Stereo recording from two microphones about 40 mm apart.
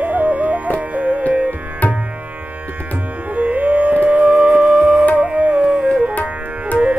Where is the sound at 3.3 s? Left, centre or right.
Right.